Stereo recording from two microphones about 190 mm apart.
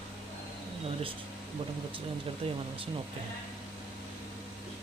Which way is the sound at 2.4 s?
30° right (ahead or behind).